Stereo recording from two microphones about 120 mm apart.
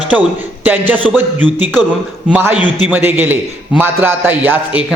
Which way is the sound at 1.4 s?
5° left (ahead or behind).